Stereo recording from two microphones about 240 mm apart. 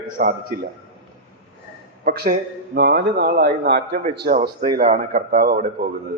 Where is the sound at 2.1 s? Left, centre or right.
Right.